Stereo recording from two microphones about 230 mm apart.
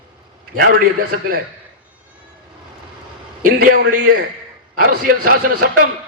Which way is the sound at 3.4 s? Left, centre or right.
Right.